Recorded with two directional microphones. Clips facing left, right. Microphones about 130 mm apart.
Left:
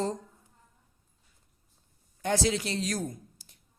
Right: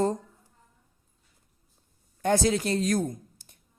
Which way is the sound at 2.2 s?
50° right (ahead or behind).